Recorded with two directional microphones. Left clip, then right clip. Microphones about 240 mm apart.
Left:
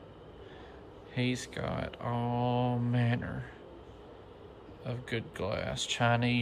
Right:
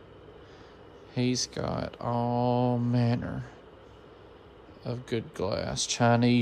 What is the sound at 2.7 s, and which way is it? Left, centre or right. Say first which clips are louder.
Speech: right 4 dB; centre.